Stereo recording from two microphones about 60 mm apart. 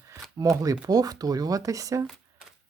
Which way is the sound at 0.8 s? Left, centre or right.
Right.